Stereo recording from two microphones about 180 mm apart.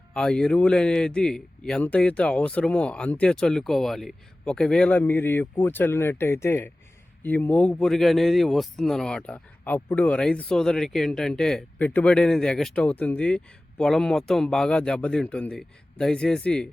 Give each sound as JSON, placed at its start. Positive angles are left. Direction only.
{"t": 0.1, "sound": "a man's voice", "side_deg": 5}